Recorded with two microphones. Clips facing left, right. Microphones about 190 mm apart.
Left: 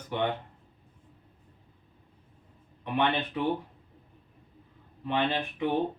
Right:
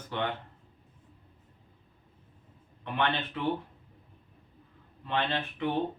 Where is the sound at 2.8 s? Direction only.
15° left (ahead or behind).